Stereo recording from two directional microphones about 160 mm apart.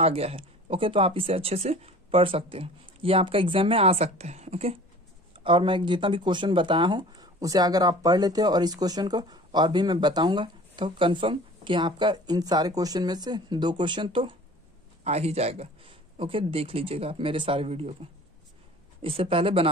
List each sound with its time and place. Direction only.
0.0 s speech: 40° right (ahead or behind)
15.0 s speech: 40° right (ahead or behind)
18.9 s speech: 35° right (ahead or behind)